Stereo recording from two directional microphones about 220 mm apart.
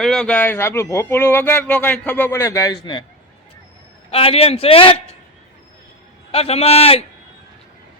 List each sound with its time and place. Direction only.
0.0 s speech: centre (ahead or behind); by 3.0 s 20° left (ahead or behind)
4.1 s a man's voice: 25° left (ahead or behind)
6.3 s a man's voice: 25° left (ahead or behind)